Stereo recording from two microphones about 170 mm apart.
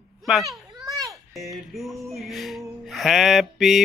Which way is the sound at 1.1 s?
Centre (ahead or behind).